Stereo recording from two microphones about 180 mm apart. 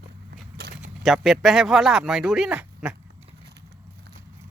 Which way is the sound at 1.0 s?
Centre (ahead or behind).